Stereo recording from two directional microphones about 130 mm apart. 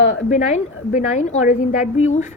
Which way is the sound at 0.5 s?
65° left (ahead or behind).